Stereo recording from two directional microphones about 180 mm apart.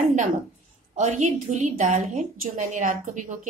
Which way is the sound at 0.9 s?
40° right (ahead or behind).